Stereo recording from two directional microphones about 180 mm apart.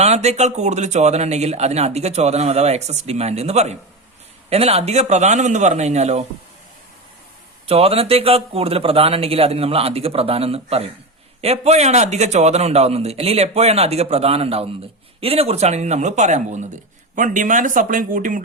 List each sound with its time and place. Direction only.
0.0 s a man's voice: 35° right (ahead or behind)
7.7 s a man's voice: 35° right (ahead or behind); by 18.4 s 50° right (ahead or behind)